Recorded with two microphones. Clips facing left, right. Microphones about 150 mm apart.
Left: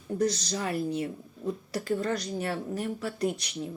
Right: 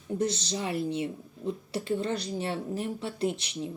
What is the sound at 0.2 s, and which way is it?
Speech, 30° right (ahead or behind).